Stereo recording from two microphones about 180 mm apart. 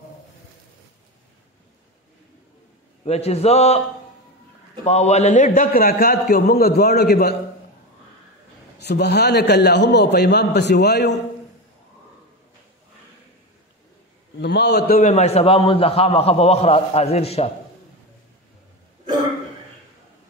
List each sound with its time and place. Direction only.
3.1 s a man's voice: 35° left (ahead or behind)
4.8 s a man's voice: 40° left (ahead or behind); by 7.3 s 60° left (ahead or behind)
8.7 s a man's voice: 65° left (ahead or behind)
14.3 s a man's voice: 70° left (ahead or behind)
15.0 s a man's voice: 40° left (ahead or behind)